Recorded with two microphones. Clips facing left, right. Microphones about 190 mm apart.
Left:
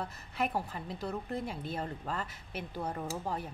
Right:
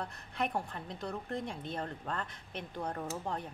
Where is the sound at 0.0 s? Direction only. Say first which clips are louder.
Left 1 dB; 5° left (ahead or behind).